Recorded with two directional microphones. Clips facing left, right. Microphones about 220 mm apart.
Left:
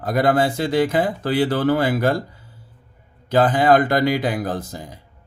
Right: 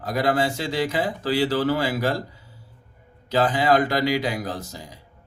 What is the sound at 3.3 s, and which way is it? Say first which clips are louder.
Speech: left 4 dB; 55° left (ahead or behind).